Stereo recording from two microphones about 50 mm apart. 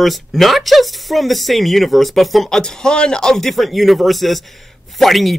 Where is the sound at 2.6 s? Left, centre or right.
Centre.